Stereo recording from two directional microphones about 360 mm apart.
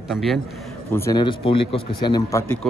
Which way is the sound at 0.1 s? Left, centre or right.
Centre.